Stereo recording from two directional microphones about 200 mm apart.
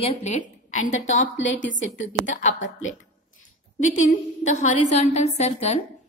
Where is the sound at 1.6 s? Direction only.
70° left (ahead or behind).